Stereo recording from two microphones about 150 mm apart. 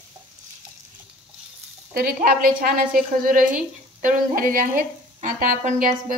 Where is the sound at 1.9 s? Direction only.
75° right (ahead or behind).